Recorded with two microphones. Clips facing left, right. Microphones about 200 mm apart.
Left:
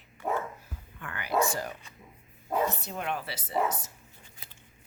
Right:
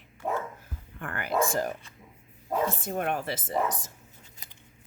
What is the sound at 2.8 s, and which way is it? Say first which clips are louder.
Speech: right 5 dB; 50° right (ahead or behind).